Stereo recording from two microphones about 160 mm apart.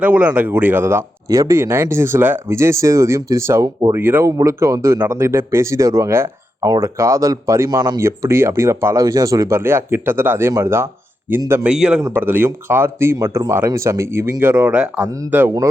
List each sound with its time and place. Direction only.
0.0 s speech: 10° right (ahead or behind)